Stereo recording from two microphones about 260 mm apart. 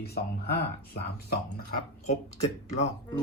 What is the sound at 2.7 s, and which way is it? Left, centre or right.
Speech, left.